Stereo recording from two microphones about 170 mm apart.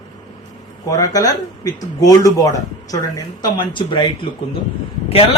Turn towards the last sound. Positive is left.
turn(degrees=35)  # may be behind; listen again after turning